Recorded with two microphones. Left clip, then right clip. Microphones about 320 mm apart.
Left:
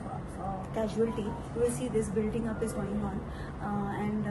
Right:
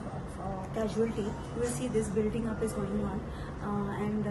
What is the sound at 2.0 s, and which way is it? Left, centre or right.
Speech, centre.